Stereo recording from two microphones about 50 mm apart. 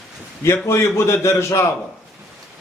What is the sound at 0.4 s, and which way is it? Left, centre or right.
Speech, left.